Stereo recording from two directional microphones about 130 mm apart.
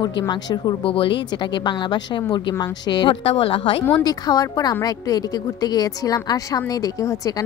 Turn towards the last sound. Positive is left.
turn(degrees=25)  # may be behind; listen again after turning